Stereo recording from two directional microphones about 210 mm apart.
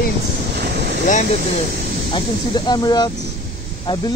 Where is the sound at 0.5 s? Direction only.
50° right (ahead or behind).